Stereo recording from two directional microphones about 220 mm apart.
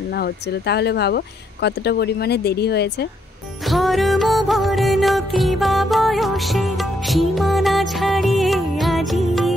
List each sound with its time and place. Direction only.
0.1 s speech: 50° left (ahead or behind)
3.6 s music: centre (ahead or behind)